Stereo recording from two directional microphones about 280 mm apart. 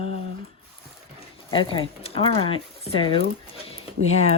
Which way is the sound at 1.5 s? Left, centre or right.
Centre.